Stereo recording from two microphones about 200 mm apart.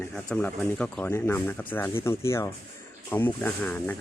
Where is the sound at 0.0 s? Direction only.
5° left (ahead or behind).